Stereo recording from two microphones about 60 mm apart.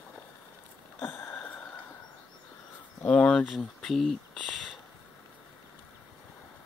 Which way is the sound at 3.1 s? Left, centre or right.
Centre.